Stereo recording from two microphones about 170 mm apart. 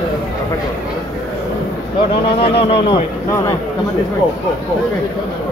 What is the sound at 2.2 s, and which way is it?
Speech, 75° left (ahead or behind).